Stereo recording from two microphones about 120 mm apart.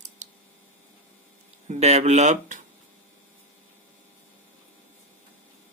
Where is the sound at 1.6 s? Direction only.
65° right (ahead or behind).